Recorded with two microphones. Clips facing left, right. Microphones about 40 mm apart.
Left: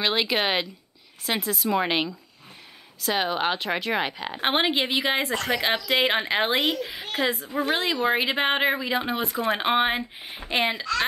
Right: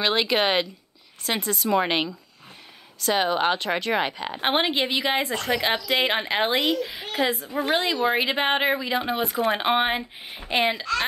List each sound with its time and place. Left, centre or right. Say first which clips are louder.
0.0 s a woman's voice: right 2 dB; centre
5.3 s speech: even; left
5.6 s a woman's voice: left 1 dB; centre
7.1 s a woman's voice: right 1 dB; centre